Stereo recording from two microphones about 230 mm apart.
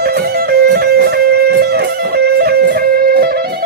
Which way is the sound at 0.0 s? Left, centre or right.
Right.